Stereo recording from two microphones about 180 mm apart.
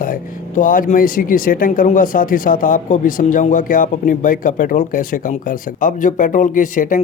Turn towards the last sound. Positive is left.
turn(degrees=45)  # may be behind; listen again after turning